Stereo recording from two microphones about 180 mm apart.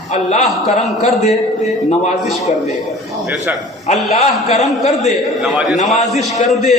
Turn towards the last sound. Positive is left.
turn(degrees=0)  # may be behind; listen again after turning